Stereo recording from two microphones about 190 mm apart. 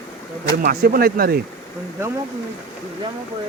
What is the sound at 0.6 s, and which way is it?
Speech, 50° right (ahead or behind).